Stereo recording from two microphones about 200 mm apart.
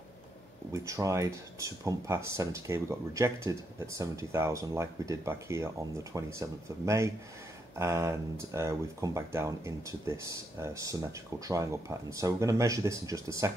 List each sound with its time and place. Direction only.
0.8 s speech: 15° right (ahead or behind)